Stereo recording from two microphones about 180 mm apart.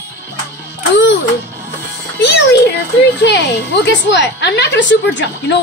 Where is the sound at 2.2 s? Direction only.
65° left (ahead or behind).